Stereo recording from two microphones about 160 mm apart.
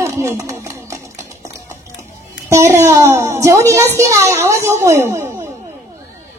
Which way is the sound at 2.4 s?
20° right (ahead or behind).